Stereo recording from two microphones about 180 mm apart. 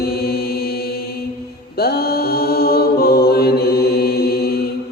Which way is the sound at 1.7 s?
60° left (ahead or behind).